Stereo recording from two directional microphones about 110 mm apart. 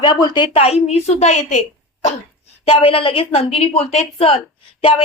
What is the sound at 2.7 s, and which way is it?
A woman's voice, 55° left (ahead or behind).